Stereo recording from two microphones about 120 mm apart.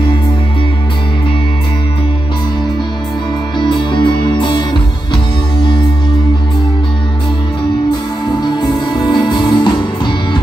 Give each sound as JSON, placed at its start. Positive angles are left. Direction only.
{"t": 3.5, "sound": "music", "side_deg": 40}
{"t": 8.4, "sound": "music", "side_deg": 35}